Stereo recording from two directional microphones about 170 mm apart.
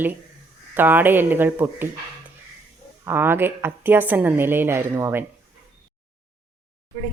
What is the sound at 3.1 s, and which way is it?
A woman's voice, 10° right (ahead or behind).